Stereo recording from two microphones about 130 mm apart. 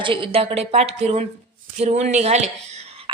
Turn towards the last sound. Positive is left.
turn(degrees=-50)  # may be behind; listen again after turning